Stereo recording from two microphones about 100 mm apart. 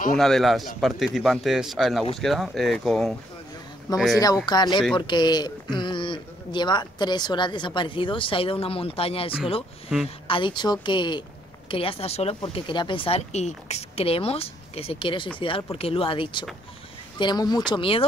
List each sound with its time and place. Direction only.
0.1 s speech: 5° left (ahead or behind)
3.9 s a man's voice: 40° left (ahead or behind); by 9.3 s 70° left (ahead or behind)
10.0 s a man's voice: 60° left (ahead or behind)
11.7 s speech: 70° left (ahead or behind); by 12.4 s 85° left
12.5 s speech: 55° left (ahead or behind)
17.2 s a man's voice: 45° left (ahead or behind)
17.6 s speech: 60° left (ahead or behind)